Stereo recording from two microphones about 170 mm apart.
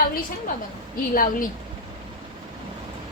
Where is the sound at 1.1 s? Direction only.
55° left (ahead or behind).